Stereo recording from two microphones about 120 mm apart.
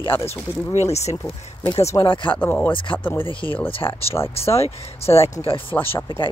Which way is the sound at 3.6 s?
50° left (ahead or behind).